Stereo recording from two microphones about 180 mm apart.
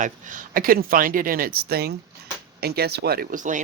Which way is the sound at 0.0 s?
45° right (ahead or behind).